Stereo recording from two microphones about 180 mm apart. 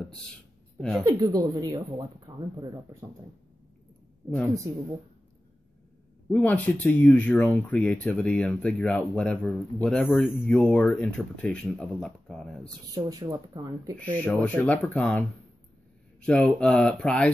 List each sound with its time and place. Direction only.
0.7 s speech: 5° left (ahead or behind)
1.0 s speech: 20° right (ahead or behind)
6.3 s speech: 10° left (ahead or behind)
12.6 s speech: 20° right (ahead or behind)
13.9 s speech: 10° left (ahead or behind)